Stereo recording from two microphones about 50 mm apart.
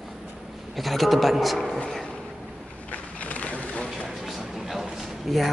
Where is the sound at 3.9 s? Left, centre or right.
Centre.